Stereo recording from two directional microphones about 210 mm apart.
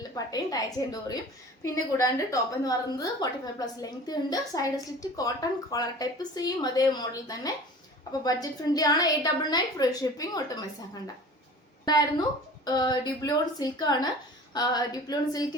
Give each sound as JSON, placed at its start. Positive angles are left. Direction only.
{"t": 0.3, "sound": "a woman's voice", "side_deg": 15}
{"t": 11.9, "sound": "a woman's voice", "side_deg": 20}